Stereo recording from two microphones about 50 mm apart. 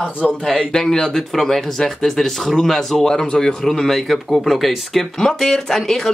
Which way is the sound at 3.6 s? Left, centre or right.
Centre.